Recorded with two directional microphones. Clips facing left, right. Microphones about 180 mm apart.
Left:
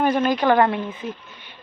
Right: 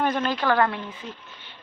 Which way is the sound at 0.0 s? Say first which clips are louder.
Left 5 dB; 10° left (ahead or behind).